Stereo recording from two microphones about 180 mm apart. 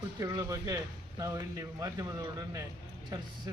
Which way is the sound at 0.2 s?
20° right (ahead or behind).